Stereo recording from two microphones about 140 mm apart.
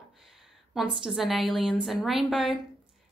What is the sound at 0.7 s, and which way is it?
Speech, centre (ahead or behind).